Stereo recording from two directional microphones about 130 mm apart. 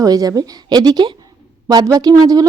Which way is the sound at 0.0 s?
30° right (ahead or behind).